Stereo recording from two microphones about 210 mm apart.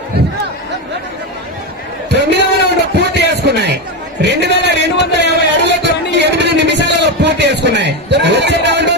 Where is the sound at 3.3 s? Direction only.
55° right (ahead or behind).